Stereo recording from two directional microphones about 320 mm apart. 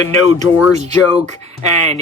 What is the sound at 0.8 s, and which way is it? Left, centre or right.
Speech, centre.